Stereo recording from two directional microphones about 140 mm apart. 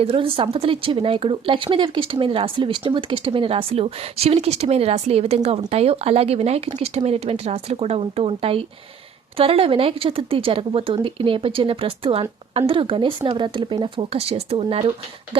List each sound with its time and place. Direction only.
0.0 s speech: 40° right (ahead or behind)